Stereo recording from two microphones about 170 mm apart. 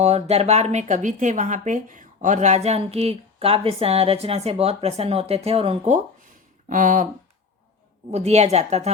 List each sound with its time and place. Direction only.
0.0 s speech: 40° right (ahead or behind)
6.7 s speech: 50° right (ahead or behind)
8.1 s speech: 40° right (ahead or behind)